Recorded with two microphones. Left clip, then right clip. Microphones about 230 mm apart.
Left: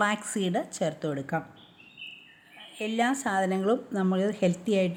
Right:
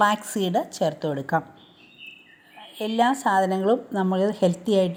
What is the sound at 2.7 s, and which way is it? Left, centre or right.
A woman's voice, centre.